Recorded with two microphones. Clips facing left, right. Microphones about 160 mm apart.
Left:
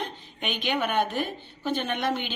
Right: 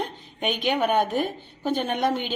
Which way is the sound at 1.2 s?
40° right (ahead or behind).